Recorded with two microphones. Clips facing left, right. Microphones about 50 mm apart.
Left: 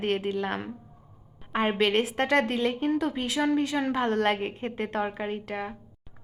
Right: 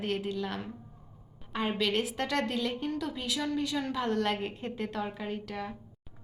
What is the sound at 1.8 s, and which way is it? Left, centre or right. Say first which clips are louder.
A woman's voice: left 5 dB; left.